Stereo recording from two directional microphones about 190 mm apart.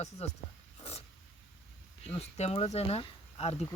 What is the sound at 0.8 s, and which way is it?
Snort, 30° left (ahead or behind).